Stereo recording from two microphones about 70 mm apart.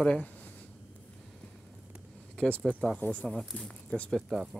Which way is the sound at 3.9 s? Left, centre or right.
Centre.